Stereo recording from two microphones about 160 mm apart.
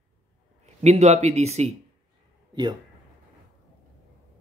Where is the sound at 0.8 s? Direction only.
45° right (ahead or behind).